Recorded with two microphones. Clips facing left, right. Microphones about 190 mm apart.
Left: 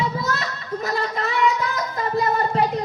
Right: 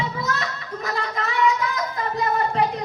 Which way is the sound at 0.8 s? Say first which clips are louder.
Left 2 dB; 35° left (ahead or behind).